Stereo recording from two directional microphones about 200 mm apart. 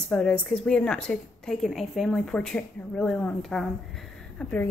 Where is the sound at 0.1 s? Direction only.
5° left (ahead or behind).